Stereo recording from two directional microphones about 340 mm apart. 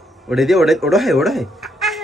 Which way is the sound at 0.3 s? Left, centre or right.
Centre.